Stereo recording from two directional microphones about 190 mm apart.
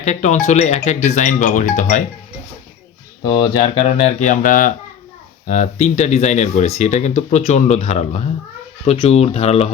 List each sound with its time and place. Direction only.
0.0 s speech: 40° left (ahead or behind)
3.2 s speech: 20° left (ahead or behind)